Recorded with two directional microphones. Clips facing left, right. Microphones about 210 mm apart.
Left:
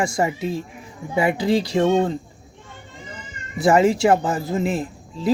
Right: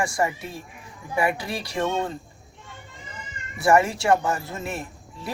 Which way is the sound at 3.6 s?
20° left (ahead or behind).